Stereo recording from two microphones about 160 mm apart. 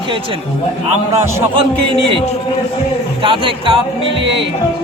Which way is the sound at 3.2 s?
30° right (ahead or behind).